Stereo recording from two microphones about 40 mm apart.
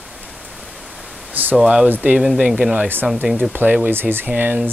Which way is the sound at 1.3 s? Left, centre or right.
Right.